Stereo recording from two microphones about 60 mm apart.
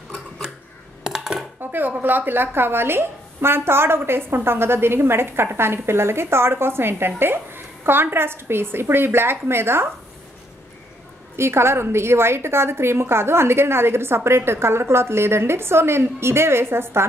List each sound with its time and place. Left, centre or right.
1.0 s a sound: centre
1.6 s speech: right
11.3 s a woman's voice: right